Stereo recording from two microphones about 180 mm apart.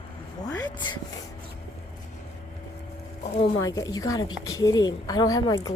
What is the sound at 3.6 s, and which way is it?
Speech, 20° left (ahead or behind).